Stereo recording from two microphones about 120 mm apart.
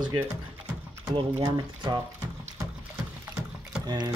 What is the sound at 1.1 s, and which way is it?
Speech, 35° right (ahead or behind).